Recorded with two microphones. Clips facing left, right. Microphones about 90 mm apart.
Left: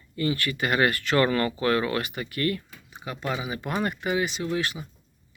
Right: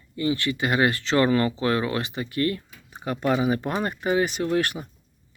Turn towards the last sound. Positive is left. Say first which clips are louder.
# right 4 dB
turn(degrees=-50)  # may be behind; listen again after turning